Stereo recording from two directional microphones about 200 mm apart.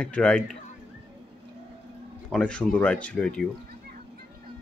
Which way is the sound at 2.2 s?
5° left (ahead or behind).